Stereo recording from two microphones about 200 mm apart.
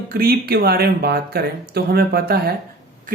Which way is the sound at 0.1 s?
50° right (ahead or behind).